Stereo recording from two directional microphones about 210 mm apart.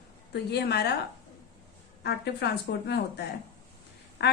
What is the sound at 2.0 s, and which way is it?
Speech, 50° left (ahead or behind).